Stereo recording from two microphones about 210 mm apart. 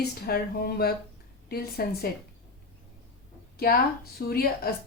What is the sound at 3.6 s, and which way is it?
Speech, 45° left (ahead or behind).